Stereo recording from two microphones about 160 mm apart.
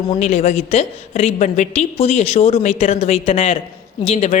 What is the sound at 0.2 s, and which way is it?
Speech, 45° left (ahead or behind).